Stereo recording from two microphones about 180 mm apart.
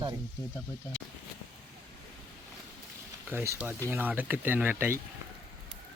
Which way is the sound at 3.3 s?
15° right (ahead or behind).